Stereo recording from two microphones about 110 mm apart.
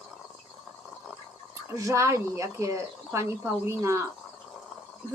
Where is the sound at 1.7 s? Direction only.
25° right (ahead or behind).